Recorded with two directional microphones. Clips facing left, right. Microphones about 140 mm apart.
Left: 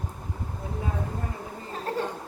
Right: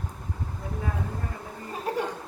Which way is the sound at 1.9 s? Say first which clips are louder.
Right 1 dB; 15° right (ahead or behind).